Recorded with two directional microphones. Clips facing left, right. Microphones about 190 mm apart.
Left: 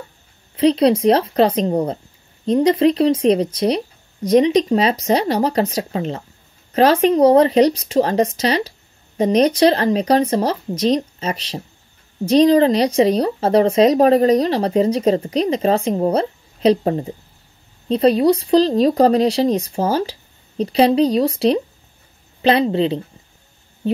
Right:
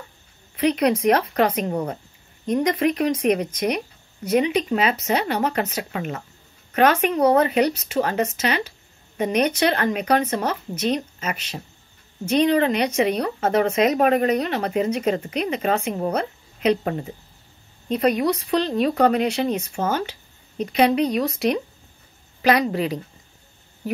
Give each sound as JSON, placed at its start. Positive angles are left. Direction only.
{"t": 0.6, "sound": "a woman's voice", "side_deg": 30}